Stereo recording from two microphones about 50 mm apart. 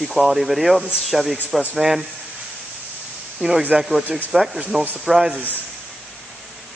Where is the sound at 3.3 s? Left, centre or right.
Centre.